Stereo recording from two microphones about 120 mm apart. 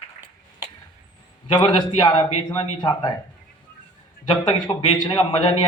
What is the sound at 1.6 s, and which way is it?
A man's voice, 40° left (ahead or behind).